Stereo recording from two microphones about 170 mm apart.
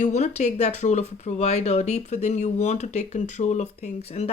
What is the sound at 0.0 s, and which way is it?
Speech, 40° left (ahead or behind).